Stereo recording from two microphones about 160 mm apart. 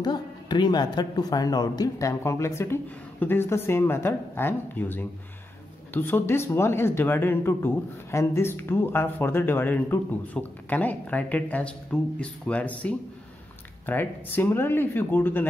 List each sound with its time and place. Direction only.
0.0 s speech: 25° left (ahead or behind)